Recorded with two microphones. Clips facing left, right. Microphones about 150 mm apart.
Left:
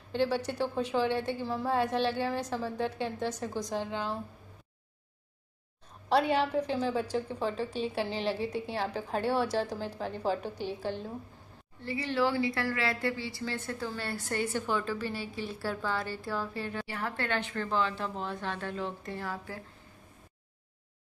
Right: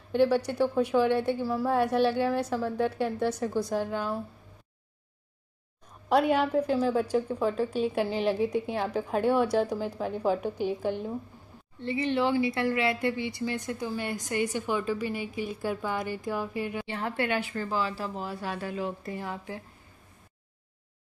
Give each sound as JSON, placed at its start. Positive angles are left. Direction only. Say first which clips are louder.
{"t": 0.1, "sound": "a woman's voice", "louder": "right 6 dB", "side_deg": -10}
{"t": 6.0, "sound": "a woman's voice", "louder": "right 3 dB", "side_deg": -10}